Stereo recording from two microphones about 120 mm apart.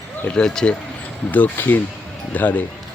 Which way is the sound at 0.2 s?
10° left (ahead or behind).